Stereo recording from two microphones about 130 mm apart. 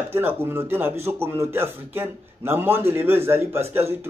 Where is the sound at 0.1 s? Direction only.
15° right (ahead or behind).